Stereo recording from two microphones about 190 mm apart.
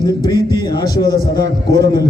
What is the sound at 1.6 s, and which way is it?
Speech, 65° right (ahead or behind).